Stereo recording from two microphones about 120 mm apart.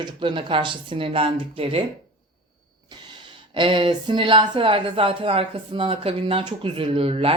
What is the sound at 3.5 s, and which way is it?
Speech, 45° right (ahead or behind).